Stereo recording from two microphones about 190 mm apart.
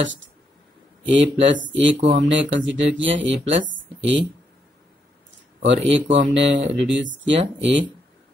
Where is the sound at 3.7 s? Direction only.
80° right.